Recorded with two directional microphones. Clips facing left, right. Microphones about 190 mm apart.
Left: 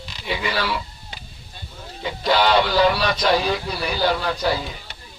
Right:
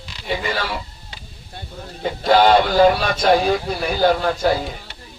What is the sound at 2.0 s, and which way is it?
Speech, 50° right (ahead or behind).